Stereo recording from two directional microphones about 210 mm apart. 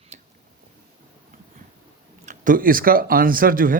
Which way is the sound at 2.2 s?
40° right (ahead or behind).